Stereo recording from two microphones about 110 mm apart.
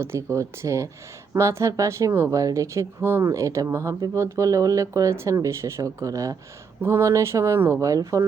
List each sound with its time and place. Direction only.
0.0 s speech: 25° right (ahead or behind)